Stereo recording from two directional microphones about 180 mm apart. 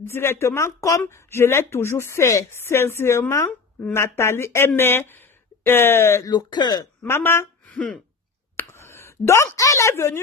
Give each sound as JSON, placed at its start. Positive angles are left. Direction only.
{"t": 0.0, "sound": "a woman's voice", "side_deg": 15}